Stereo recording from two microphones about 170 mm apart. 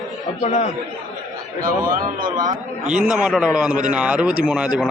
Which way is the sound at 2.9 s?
5° right (ahead or behind).